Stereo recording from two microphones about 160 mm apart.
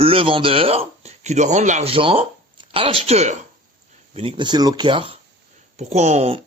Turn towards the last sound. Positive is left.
turn(degrees=-40)  # may be behind; listen again after turning